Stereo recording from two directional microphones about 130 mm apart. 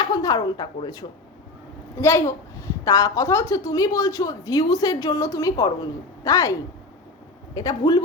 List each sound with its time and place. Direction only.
0.0 s speech: 30° left (ahead or behind)
2.0 s a woman's voice: 20° left (ahead or behind)